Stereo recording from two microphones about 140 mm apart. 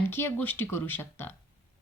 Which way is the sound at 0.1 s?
15° left (ahead or behind).